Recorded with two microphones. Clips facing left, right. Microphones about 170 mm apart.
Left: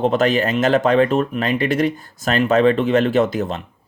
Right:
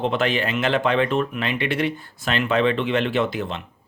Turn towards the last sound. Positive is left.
turn(degrees=40)  # may be behind; listen again after turning